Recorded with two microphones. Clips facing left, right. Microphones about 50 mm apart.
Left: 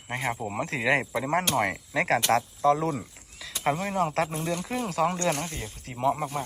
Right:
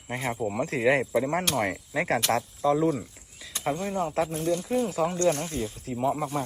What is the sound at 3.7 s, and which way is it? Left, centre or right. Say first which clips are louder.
Speech: right 2 dB; left.